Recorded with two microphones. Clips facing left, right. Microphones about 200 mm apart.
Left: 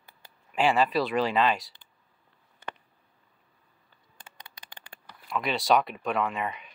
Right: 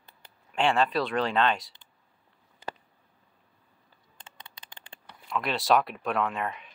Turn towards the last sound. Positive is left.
turn(degrees=0)  # may be behind; listen again after turning